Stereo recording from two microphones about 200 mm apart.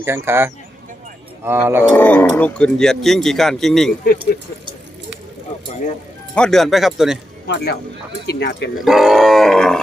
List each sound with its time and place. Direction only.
0.0 s speech: 10° right (ahead or behind)
1.8 s speech: 10° left (ahead or behind)
6.3 s speech: 5° left (ahead or behind)
7.4 s speech: 55° left (ahead or behind)
8.8 s speech: centre (ahead or behind)